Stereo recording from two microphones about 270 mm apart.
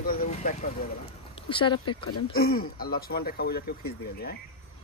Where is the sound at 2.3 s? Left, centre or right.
Left.